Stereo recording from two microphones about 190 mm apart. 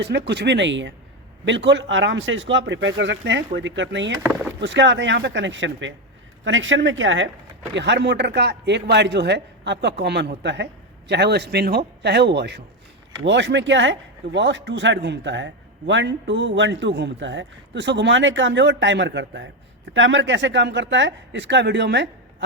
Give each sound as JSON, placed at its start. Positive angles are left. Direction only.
{"t": 0.0, "sound": "a man's voice", "side_deg": -65}
{"t": 6.4, "sound": "speech", "side_deg": -90}
{"t": 7.7, "sound": "a man's voice", "side_deg": -65}